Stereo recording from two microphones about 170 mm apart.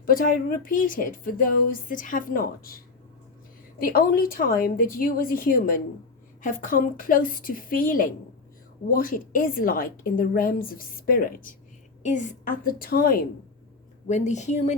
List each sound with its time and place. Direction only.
0.0 s a woman's voice: 55° left (ahead or behind)
12.0 s a woman's voice: 45° left (ahead or behind)
14.1 s speech: 45° left (ahead or behind)